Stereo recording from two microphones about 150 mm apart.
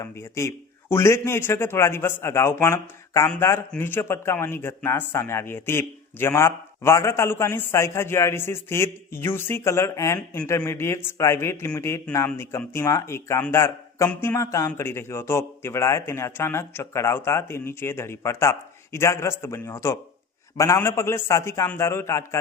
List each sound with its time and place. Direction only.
0.0 s speech: 20° left (ahead or behind)